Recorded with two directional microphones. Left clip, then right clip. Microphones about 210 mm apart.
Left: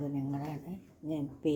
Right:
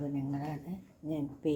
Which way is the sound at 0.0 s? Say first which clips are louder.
Even; 5° left (ahead or behind).